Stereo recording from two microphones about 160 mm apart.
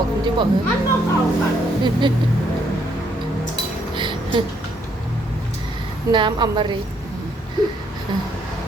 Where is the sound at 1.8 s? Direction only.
30° right (ahead or behind).